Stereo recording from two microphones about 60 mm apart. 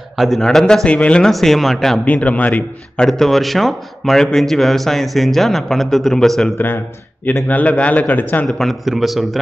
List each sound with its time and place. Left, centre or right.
0.1 s speech: centre
0.8 s a man's voice: left
1.2 s speech: centre
2.0 s a man's voice: left
3.1 s speech: centre
7.4 s a man's voice: left
8.5 s speech: centre